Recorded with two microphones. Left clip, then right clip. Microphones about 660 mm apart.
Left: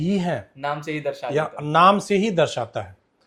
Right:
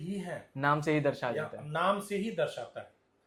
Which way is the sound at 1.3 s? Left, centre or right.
Left.